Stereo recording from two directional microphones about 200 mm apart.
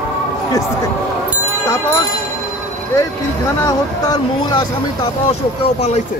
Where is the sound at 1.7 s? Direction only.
15° left (ahead or behind).